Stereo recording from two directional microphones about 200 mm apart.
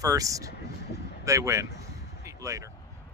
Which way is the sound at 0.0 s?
15° right (ahead or behind).